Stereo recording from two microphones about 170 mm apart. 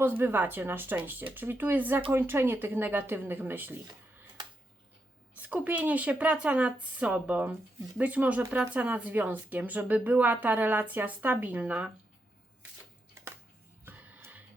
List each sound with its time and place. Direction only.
0.0 s speech: 10° right (ahead or behind)
5.3 s speech: 10° right (ahead or behind)
13.8 s music: 10° right (ahead or behind)